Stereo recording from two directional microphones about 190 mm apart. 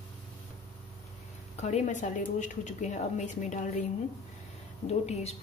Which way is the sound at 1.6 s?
35° left (ahead or behind).